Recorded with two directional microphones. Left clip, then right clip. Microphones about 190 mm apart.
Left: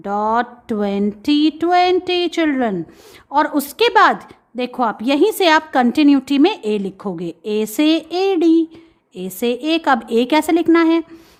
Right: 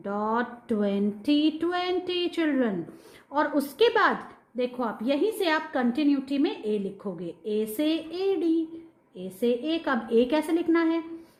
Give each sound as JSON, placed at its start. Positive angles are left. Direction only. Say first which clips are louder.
{"t": 0.0, "sound": "a woman's voice", "louder": "left 10 dB", "side_deg": 35}